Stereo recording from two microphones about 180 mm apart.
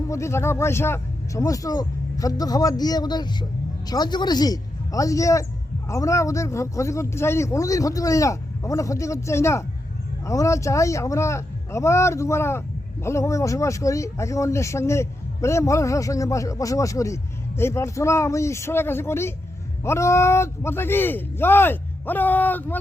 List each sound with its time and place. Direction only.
0.1 s speech: 15° left (ahead or behind)